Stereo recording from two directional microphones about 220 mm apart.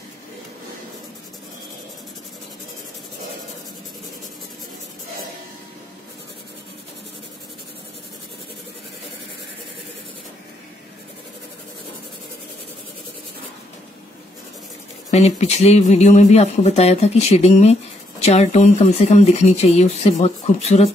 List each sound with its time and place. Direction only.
15.0 s speech: 30° left (ahead or behind)